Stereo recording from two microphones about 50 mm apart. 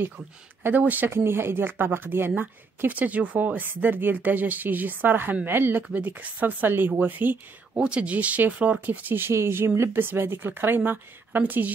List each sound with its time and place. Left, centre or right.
0.7 s speech: right
1.1 s speech: right
2.8 s speech: right
7.8 s speech: right
9.3 s speech: right
9.9 s speech: right